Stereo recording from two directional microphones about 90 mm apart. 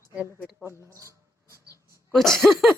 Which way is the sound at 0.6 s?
30° right (ahead or behind).